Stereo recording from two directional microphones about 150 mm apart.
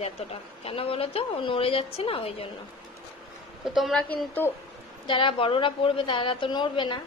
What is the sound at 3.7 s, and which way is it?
Speech, centre (ahead or behind).